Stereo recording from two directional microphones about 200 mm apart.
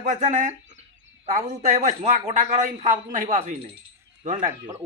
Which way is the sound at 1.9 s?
40° right (ahead or behind).